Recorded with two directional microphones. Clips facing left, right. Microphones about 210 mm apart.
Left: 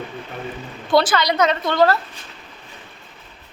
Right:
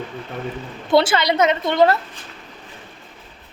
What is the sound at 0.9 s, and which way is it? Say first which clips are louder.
A woman's voice: right 1 dB; 25° right (ahead or behind).